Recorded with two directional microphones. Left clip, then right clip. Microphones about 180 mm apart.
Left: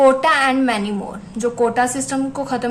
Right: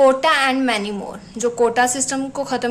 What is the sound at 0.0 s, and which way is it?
A woman's voice, 15° right (ahead or behind).